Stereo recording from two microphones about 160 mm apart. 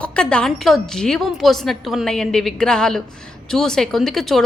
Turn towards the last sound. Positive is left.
turn(degrees=0)  # may be behind; listen again after turning